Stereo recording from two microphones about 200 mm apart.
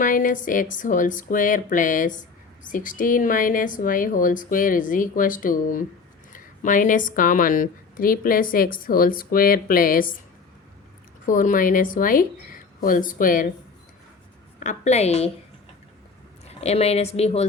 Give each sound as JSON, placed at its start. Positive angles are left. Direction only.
{"t": 0.0, "sound": "a woman's voice", "side_deg": 40}
{"t": 11.3, "sound": "a woman's voice", "side_deg": 40}
{"t": 14.6, "sound": "speech", "side_deg": 35}
{"t": 16.5, "sound": "speech", "side_deg": 30}